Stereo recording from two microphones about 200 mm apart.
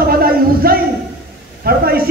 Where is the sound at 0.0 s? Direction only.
50° right (ahead or behind).